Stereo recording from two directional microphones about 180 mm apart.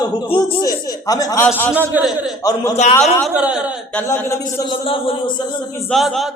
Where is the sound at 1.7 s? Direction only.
10° right (ahead or behind).